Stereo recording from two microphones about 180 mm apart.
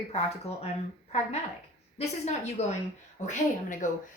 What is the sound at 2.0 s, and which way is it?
A woman's voice, 40° left (ahead or behind).